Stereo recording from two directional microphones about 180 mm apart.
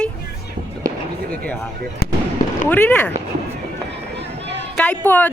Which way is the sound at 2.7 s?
10° left (ahead or behind).